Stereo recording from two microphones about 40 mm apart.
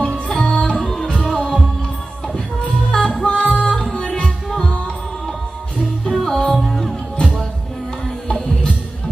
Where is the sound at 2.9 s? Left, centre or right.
Centre.